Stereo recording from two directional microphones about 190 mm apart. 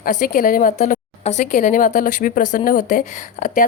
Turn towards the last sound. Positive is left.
turn(degrees=45)  # may be behind; listen again after turning